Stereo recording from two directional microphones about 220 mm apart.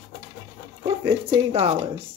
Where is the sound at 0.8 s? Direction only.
25° right (ahead or behind).